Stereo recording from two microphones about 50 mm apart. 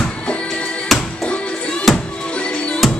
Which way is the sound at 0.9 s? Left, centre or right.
Centre.